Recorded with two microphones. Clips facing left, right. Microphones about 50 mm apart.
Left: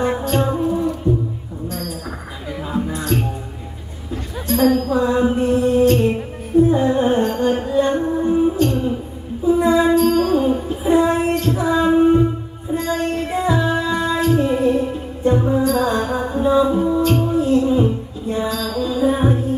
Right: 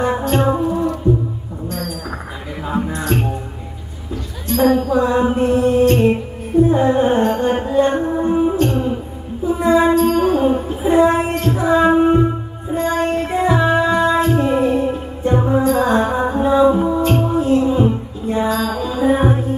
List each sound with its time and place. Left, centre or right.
0.3 s music: right
0.6 s music: centre
1.7 s a sound: right
3.1 s music: right
4.6 s mantra: right
5.5 s music: right
11.3 s female singing: right
12.7 s music: right
13.4 s music: right